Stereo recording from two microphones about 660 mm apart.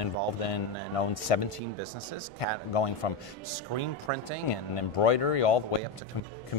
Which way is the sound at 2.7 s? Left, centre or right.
Left.